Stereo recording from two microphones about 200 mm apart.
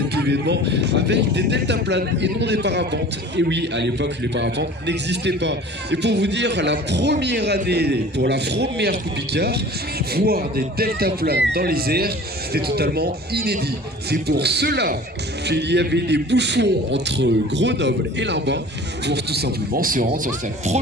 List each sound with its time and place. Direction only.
0.1 s speech: 55° right (ahead or behind); by 20.7 s 40° right (ahead or behind)